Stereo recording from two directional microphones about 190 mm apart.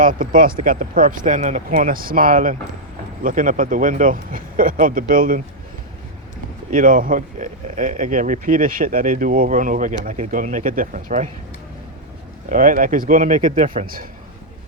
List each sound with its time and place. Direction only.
0.0 s speech: 45° right (ahead or behind)
6.7 s speech: 45° right (ahead or behind)
12.5 s speech: 45° right (ahead or behind)